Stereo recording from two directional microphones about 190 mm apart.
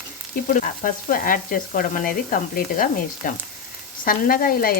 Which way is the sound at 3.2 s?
45° left (ahead or behind).